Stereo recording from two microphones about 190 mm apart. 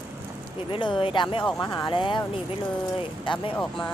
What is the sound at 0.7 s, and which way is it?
Speech, 25° left (ahead or behind).